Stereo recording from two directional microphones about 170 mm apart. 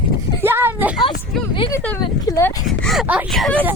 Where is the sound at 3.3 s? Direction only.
5° left (ahead or behind).